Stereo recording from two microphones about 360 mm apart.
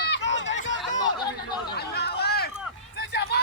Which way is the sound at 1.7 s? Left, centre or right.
Left.